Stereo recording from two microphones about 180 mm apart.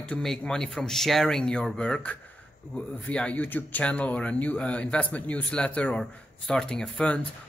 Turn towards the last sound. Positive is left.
turn(degrees=5)  # may be behind; listen again after turning